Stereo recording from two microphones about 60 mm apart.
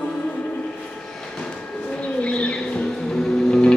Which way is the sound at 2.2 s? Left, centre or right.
Centre.